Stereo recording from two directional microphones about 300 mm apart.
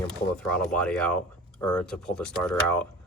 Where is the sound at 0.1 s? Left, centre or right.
Centre.